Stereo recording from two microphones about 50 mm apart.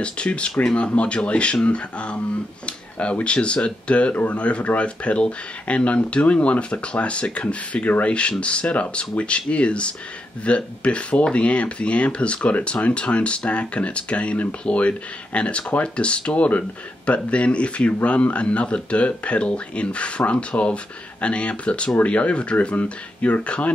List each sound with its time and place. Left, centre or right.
0.0 s speech: left